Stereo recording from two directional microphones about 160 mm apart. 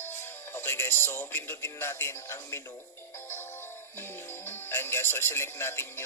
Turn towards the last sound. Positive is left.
turn(degrees=15)  # may be behind; listen again after turning